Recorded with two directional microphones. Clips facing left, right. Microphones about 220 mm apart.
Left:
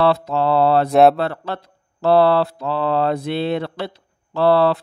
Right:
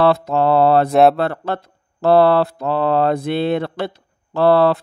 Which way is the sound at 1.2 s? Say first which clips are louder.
Right 3 dB; 50° right (ahead or behind).